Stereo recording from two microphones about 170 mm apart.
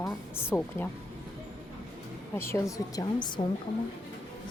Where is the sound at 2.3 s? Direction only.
15° left (ahead or behind).